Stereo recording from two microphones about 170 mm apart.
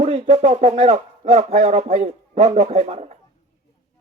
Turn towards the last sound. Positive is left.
turn(degrees=-40)  # may be behind; listen again after turning